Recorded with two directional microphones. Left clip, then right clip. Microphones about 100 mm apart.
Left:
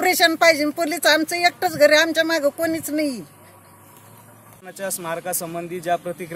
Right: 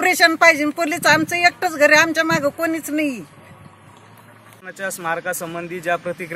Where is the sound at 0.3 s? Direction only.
Centre (ahead or behind).